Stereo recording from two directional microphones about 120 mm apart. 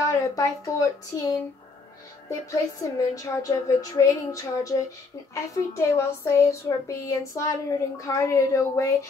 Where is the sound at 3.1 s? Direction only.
30° left (ahead or behind).